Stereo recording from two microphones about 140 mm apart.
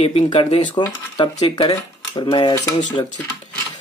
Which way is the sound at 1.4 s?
30° left (ahead or behind).